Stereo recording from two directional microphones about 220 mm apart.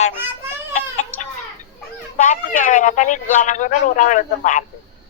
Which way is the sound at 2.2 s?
35° left (ahead or behind).